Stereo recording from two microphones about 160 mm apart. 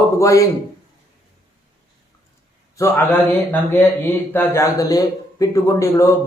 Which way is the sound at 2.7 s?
15° left (ahead or behind).